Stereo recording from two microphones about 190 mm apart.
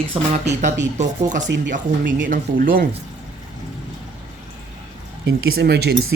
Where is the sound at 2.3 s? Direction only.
45° right (ahead or behind).